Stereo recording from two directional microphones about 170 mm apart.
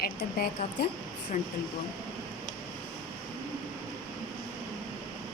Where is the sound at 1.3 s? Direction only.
50° left (ahead or behind).